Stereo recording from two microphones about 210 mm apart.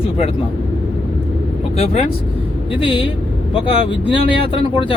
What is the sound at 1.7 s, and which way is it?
Speech, 30° left (ahead or behind).